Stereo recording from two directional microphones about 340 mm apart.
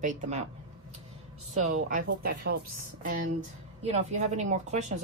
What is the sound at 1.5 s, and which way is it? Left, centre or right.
Speech, right.